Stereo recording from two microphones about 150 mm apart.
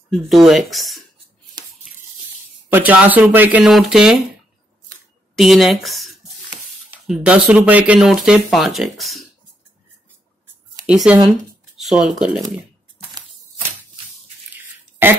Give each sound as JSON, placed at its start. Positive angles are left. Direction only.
{"t": 0.1, "sound": "speech", "side_deg": 0}
{"t": 1.6, "sound": "hands", "side_deg": -30}
{"t": 2.7, "sound": "speech", "side_deg": -10}
{"t": 5.3, "sound": "speech", "side_deg": 0}
{"t": 10.9, "sound": "speech", "side_deg": -5}
{"t": 11.2, "sound": "a sound", "side_deg": 0}
{"t": 15.0, "sound": "speech", "side_deg": -15}